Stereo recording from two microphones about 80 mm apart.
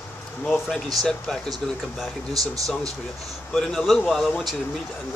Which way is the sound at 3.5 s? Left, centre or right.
Centre.